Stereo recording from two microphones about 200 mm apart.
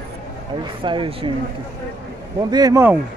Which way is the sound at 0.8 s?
25° right (ahead or behind).